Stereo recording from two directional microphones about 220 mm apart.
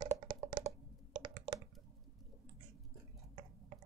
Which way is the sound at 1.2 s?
20° right (ahead or behind).